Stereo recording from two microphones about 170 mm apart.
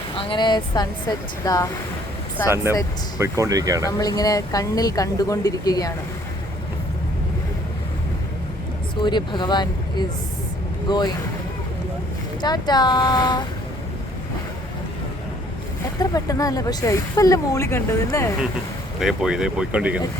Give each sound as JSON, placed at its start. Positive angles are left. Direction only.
{"t": 0.1, "sound": "speech", "side_deg": 30}
{"t": 3.2, "sound": "speech", "side_deg": -15}
{"t": 3.8, "sound": "speech", "side_deg": 20}
{"t": 9.0, "sound": "speech", "side_deg": 25}
{"t": 12.4, "sound": "speech", "side_deg": 25}
{"t": 16.0, "sound": "speech", "side_deg": 20}
{"t": 18.9, "sound": "speech", "side_deg": 0}